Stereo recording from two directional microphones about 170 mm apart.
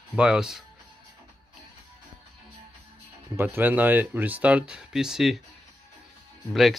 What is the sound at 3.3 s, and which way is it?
Speech, 10° right (ahead or behind).